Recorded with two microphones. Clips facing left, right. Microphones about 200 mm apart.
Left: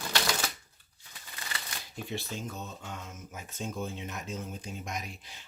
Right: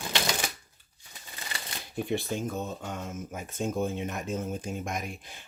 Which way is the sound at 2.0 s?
50° right (ahead or behind).